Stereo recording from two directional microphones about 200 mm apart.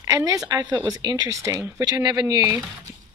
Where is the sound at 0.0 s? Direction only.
20° right (ahead or behind).